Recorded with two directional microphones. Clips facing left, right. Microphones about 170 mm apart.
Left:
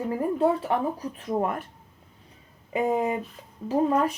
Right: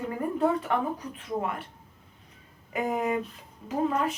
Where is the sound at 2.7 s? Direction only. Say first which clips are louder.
Left 3 dB; 25° left (ahead or behind).